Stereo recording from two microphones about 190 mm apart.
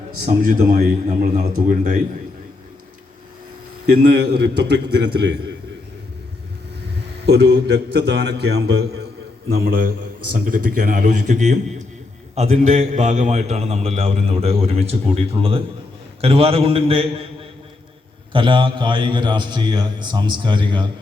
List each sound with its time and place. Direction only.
0.3 s a man's voice: 40° right (ahead or behind)
3.9 s a man's voice: 55° right (ahead or behind)
7.3 s a man's voice: 60° right (ahead or behind)
9.5 s a man's voice: 50° right (ahead or behind); by 17.2 s 30° right (ahead or behind)
18.3 s a man's voice: 25° right (ahead or behind)